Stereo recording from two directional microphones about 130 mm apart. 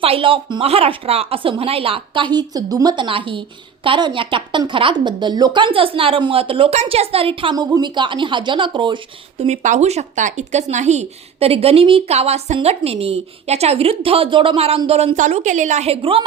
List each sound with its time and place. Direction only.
0.0 s a woman's voice: 45° right (ahead or behind)
7.5 s a woman's voice: 30° right (ahead or behind)
9.6 s a woman's voice: 60° right (ahead or behind)